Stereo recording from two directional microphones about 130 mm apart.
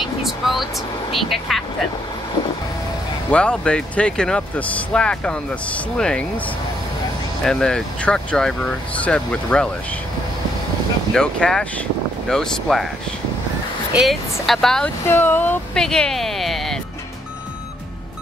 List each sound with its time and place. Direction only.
0.0 s vehicle: centre (ahead or behind)
1.1 s speech: centre (ahead or behind)
3.3 s speech: 10° left (ahead or behind)
7.4 s speech: 5° left (ahead or behind)
11.1 s speech: 5° left (ahead or behind)
13.9 s speech: centre (ahead or behind)
15.0 s speech: 15° left (ahead or behind)